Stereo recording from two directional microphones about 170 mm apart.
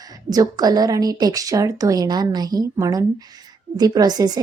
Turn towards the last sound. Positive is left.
turn(degrees=-20)  # may be behind; listen again after turning